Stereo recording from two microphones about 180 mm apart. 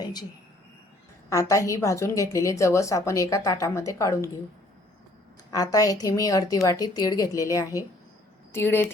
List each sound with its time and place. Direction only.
0.0 s a sound: 20° left (ahead or behind)
1.3 s a woman's voice: 20° left (ahead or behind)
5.5 s a woman's voice: 20° left (ahead or behind)